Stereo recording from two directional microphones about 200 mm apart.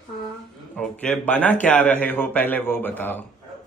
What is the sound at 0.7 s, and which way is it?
A man's voice, 5° left (ahead or behind).